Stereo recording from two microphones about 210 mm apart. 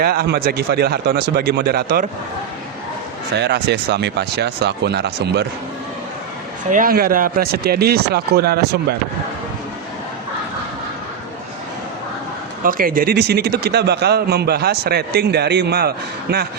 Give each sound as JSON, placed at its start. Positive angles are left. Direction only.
{"t": 0.0, "sound": "a man's voice", "side_deg": -50}
{"t": 3.3, "sound": "a man's voice", "side_deg": -55}
{"t": 6.7, "sound": "a man's voice", "side_deg": -40}
{"t": 12.6, "sound": "a man's voice", "side_deg": -45}